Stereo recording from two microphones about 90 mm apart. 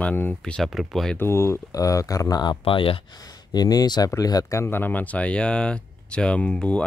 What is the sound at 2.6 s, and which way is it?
Speech, 90° left.